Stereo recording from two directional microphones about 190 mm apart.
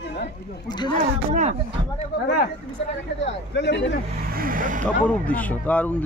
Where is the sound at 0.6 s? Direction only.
25° left (ahead or behind).